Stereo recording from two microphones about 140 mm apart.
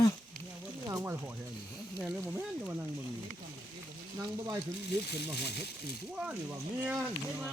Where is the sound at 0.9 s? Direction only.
20° right (ahead or behind).